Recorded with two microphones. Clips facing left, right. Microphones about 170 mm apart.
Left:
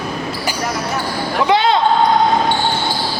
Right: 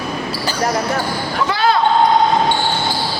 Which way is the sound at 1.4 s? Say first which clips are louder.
Left 3 dB; 20° left (ahead or behind).